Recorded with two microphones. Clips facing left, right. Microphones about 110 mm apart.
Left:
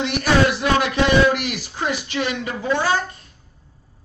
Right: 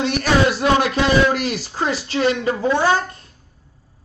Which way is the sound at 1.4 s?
35° right (ahead or behind).